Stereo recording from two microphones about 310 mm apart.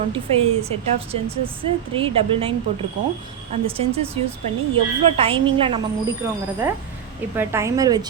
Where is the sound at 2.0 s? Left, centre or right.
Centre.